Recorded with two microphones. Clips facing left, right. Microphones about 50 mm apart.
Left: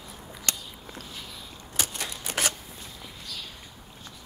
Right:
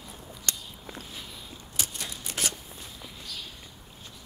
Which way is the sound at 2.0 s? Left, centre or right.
Left.